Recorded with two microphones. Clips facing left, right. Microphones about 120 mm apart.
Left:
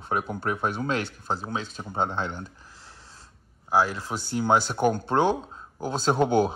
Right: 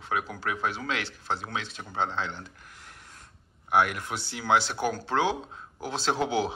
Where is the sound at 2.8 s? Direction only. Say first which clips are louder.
Even; 30° left (ahead or behind).